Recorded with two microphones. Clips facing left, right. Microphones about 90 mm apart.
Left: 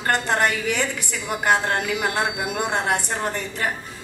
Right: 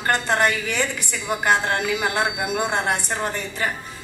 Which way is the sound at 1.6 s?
15° right (ahead or behind).